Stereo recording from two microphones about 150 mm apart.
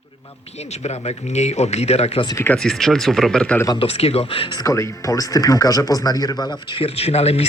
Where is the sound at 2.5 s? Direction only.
5° left (ahead or behind).